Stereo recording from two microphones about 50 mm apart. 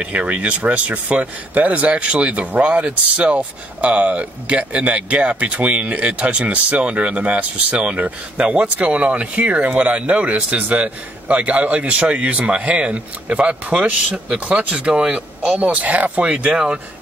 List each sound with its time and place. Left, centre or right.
0.2 s speech: right